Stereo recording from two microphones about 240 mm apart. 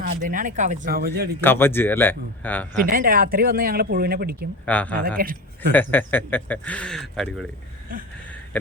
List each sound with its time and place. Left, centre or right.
0.0 s speech: right
1.4 s speech: centre
2.8 s speech: right
4.6 s speech: centre
4.9 s speech: right
5.7 s speech: centre